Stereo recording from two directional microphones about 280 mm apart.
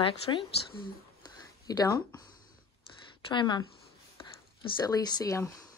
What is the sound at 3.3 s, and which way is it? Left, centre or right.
A woman's voice, centre.